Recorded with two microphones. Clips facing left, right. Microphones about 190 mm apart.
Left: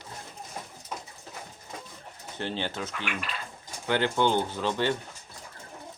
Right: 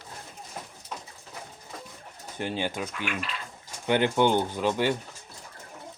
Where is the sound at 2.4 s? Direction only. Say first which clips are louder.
Right 2 dB; 10° right (ahead or behind).